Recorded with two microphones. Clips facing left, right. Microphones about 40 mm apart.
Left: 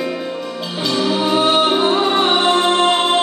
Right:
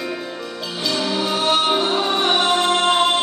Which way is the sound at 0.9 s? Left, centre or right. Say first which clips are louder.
Left 5 dB; centre.